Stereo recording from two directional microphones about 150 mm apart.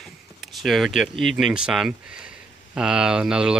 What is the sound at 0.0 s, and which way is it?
Speech, centre (ahead or behind).